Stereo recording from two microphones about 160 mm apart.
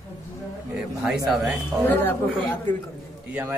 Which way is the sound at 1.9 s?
15° left (ahead or behind).